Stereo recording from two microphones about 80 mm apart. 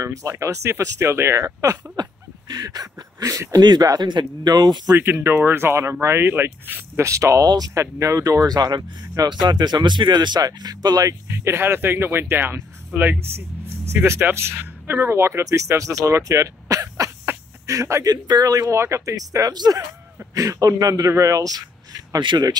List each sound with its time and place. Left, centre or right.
0.0 s speech: right
3.6 s speech: right
4.9 s speech: right
7.4 s speech: right
7.8 s speech: right
11.3 s speech: right
17.3 s a sound: right
18.0 s speech: right
20.3 s speech: right